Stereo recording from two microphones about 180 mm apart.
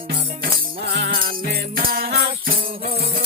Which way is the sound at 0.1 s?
60° right (ahead or behind).